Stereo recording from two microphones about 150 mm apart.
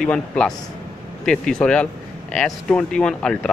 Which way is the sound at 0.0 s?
5° left (ahead or behind).